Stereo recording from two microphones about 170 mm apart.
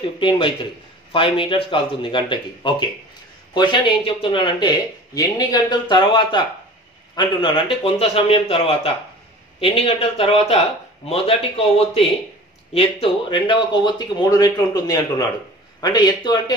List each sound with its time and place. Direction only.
0.2 s a man's voice: 30° left (ahead or behind)